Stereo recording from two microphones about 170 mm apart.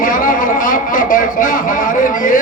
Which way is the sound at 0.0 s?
50° left (ahead or behind).